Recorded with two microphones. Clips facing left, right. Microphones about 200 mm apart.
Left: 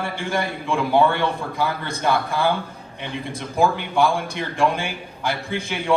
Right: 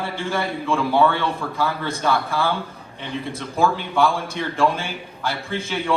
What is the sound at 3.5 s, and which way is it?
A man's voice, 15° left (ahead or behind).